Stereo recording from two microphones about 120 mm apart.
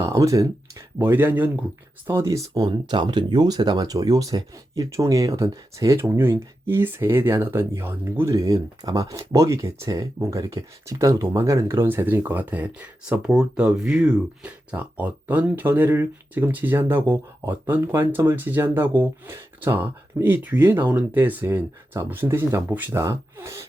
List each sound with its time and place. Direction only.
0.0 s speech: 25° right (ahead or behind)
2.6 s speech: 40° right (ahead or behind); by 23.6 s 25° right (ahead or behind)